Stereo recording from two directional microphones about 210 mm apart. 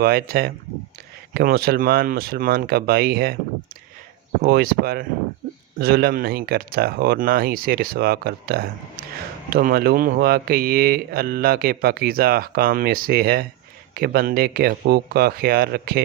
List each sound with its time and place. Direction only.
0.0 s speech: 45° right (ahead or behind)
4.4 s speech: 45° right (ahead or behind)